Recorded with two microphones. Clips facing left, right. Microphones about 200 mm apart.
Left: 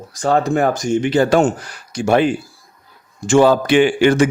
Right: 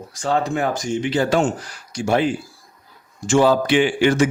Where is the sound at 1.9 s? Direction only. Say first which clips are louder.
Left 4 dB; 60° left (ahead or behind).